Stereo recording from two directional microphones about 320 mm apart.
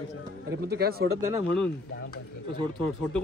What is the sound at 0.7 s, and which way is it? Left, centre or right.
Speech, right.